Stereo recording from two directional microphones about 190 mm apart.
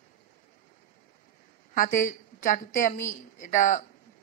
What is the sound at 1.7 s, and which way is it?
A woman's voice, 45° left (ahead or behind).